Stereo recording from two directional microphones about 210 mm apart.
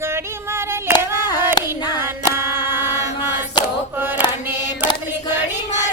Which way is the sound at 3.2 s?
20° left (ahead or behind).